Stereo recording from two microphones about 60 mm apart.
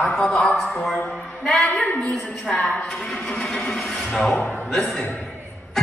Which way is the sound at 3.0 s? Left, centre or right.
Centre.